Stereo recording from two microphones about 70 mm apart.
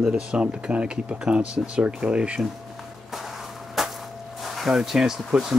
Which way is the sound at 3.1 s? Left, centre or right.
Centre.